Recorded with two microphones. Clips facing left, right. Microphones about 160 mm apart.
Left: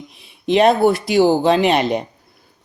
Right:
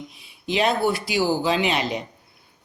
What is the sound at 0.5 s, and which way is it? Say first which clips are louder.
Speech: left 8 dB; 55° left (ahead or behind).